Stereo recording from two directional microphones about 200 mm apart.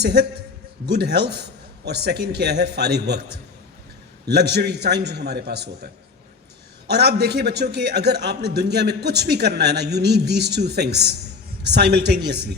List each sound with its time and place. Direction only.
0.0 s a man's voice: 55° right (ahead or behind)